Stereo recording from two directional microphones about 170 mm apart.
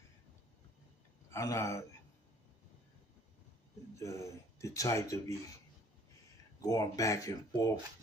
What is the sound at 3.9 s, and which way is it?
Speech, 15° left (ahead or behind).